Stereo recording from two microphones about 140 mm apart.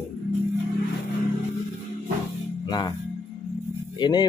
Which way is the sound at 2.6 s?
25° left (ahead or behind).